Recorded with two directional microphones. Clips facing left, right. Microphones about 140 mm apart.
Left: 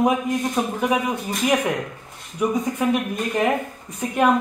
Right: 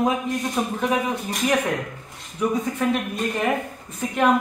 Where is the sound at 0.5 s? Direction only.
5° left (ahead or behind).